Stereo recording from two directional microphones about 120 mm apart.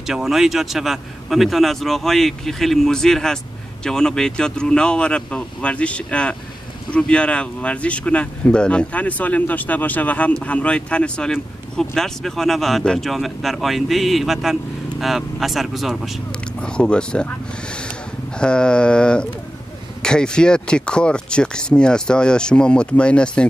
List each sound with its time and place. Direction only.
0.0 s speech: 5° right (ahead or behind)